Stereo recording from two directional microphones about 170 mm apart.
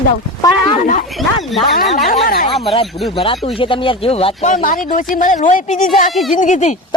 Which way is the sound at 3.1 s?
30° left (ahead or behind).